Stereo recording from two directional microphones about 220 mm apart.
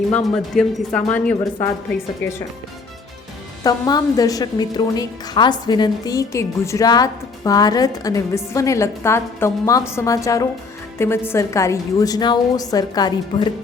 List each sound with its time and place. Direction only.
0.1 s a woman's voice: centre (ahead or behind)
3.6 s a woman's voice: 15° left (ahead or behind)